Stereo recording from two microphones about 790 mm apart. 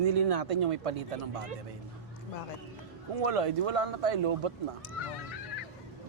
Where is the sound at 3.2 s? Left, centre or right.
Right.